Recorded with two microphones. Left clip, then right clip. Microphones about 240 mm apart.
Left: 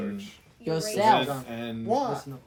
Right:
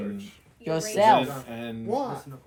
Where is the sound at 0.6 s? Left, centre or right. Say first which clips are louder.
Right 1 dB; right.